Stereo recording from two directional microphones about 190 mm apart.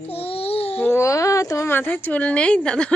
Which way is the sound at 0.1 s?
30° left (ahead or behind).